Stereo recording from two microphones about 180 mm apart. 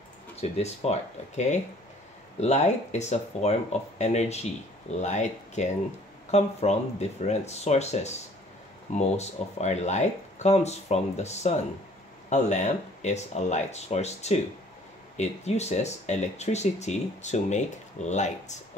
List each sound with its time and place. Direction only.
0.4 s speech: 35° left (ahead or behind)